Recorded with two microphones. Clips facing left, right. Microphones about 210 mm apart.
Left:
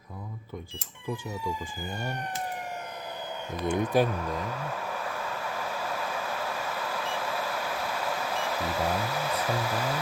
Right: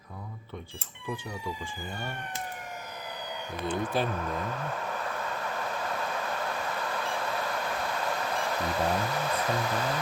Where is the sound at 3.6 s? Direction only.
15° left (ahead or behind).